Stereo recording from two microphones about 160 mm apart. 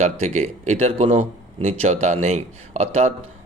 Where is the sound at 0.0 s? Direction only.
45° right (ahead or behind).